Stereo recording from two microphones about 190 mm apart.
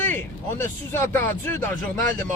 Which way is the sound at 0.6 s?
10° left (ahead or behind).